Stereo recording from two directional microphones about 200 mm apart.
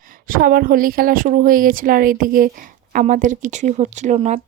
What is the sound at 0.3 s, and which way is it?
Speech, 45° right (ahead or behind).